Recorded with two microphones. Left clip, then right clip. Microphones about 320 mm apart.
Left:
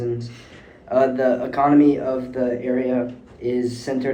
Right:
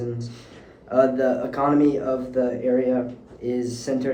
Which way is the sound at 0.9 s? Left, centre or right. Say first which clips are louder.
Left 1 dB; centre.